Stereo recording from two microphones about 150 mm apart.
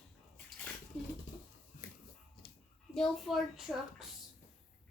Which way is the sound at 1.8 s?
75° left (ahead or behind).